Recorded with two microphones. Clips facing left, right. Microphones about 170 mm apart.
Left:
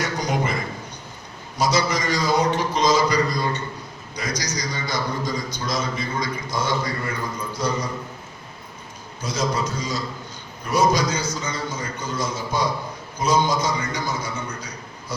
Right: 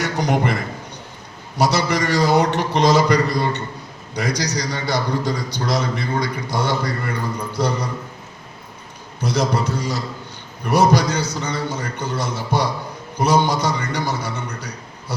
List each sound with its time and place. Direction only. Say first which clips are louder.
0.0 s a sound: right 4 dB; 65° right (ahead or behind)
1.5 s a man's voice: right 3 dB; 65° right (ahead or behind)
9.2 s a man's voice: right 4 dB; 65° right (ahead or behind)